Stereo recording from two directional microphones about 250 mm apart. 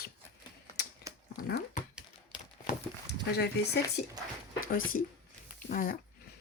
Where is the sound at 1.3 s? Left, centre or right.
Left.